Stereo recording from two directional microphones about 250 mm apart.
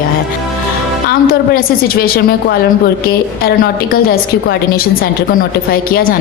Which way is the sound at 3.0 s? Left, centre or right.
Left.